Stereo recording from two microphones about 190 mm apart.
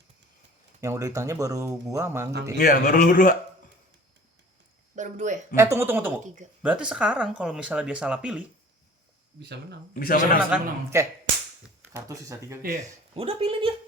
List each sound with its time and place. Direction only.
0.8 s speech: 15° right (ahead or behind)
2.6 s a man's voice: 50° left (ahead or behind)
4.9 s speech: 40° right (ahead or behind)
5.5 s speech: 15° right (ahead or behind)
9.4 s speech: 60° right (ahead or behind)
9.9 s a man's voice: 45° left (ahead or behind)
10.5 s speech: 5° right (ahead or behind)
12.6 s speech: 35° right (ahead or behind)